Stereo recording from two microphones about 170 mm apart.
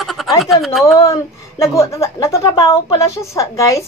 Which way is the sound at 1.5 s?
20° left (ahead or behind).